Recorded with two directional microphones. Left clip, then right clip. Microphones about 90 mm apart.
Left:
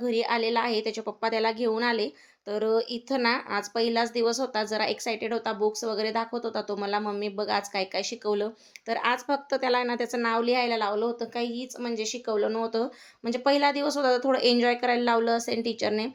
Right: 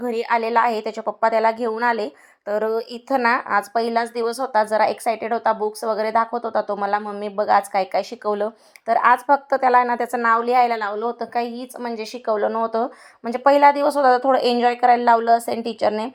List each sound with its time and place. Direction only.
0.0 s a woman's voice: 45° right (ahead or behind)